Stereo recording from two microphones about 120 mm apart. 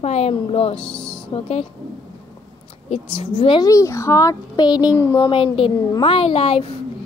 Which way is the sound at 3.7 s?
25° left (ahead or behind).